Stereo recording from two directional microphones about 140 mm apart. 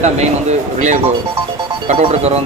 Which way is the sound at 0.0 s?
55° right (ahead or behind).